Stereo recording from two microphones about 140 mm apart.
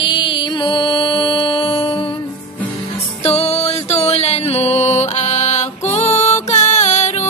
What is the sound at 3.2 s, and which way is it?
Music, 45° left (ahead or behind).